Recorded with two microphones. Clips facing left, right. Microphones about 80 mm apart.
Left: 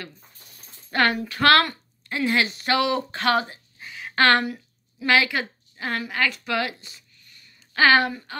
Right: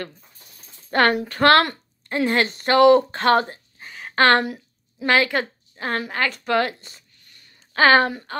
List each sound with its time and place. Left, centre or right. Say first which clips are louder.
1.1 s a woman's voice: right 2 dB; right